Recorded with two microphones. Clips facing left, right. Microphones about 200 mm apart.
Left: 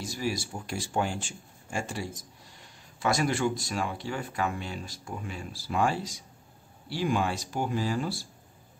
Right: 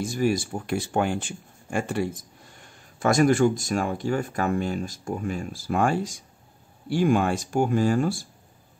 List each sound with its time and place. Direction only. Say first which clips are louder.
0.0 s speech: right 8 dB; 55° right (ahead or behind)